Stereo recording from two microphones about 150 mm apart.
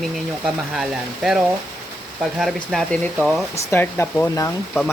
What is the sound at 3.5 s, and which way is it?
Speech, 15° left (ahead or behind).